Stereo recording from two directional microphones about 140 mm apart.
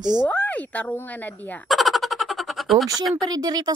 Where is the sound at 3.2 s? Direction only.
30° right (ahead or behind).